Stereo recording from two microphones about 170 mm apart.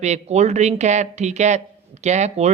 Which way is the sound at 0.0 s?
40° right (ahead or behind).